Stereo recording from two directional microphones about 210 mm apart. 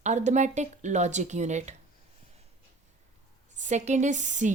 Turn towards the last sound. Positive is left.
turn(degrees=-35)  # may be behind; listen again after turning